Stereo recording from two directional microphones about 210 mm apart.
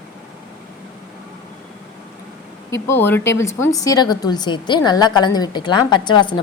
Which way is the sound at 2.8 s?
10° left (ahead or behind).